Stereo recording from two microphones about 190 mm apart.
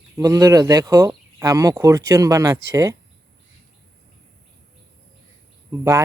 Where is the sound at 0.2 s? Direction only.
15° right (ahead or behind).